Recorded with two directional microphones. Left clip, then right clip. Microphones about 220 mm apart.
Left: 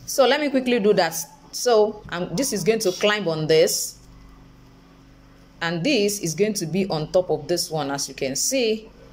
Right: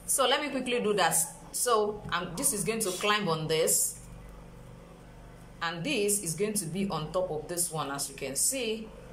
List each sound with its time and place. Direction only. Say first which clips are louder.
0.1 s a woman's voice: left 9 dB; 30° left (ahead or behind)
5.6 s a woman's voice: left 9 dB; 30° left (ahead or behind)